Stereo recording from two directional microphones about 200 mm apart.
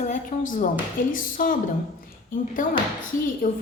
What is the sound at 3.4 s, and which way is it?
Speech, 45° left (ahead or behind).